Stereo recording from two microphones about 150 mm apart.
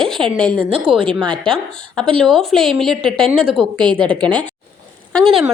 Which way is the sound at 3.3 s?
35° right (ahead or behind).